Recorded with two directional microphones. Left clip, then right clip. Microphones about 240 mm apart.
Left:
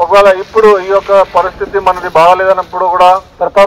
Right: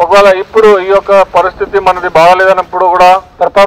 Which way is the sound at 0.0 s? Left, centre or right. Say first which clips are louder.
Right 1 dB; right.